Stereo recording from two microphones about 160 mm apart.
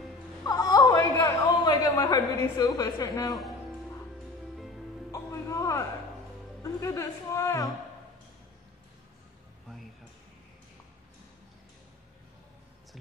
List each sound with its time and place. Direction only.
0.5 s a sound: 25° left (ahead or behind)
5.1 s music: 20° left (ahead or behind)
6.6 s speech: 20° left (ahead or behind)